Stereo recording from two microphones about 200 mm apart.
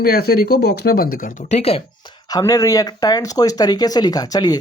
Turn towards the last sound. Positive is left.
turn(degrees=20)  # may be behind; listen again after turning